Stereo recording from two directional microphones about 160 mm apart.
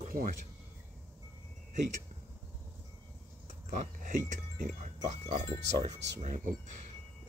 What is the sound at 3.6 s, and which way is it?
Speech, 50° right (ahead or behind).